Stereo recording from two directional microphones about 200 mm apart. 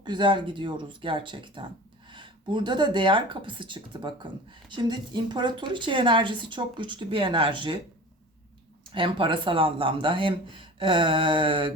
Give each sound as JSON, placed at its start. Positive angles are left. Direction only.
{"t": 0.0, "sound": "speech", "side_deg": -20}
{"t": 8.9, "sound": "speech", "side_deg": -25}